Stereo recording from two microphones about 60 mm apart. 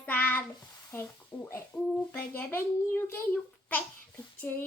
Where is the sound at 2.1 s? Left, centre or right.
Left.